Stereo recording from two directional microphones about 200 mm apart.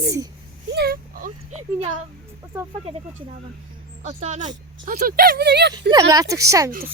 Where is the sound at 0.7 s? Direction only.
50° right (ahead or behind).